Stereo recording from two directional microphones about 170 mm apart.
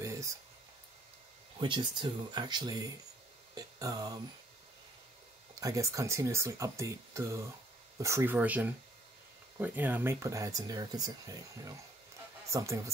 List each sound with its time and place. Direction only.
0.0 s a sound: 20° right (ahead or behind)
1.6 s speech: 30° right (ahead or behind)
5.6 s speech: 20° right (ahead or behind)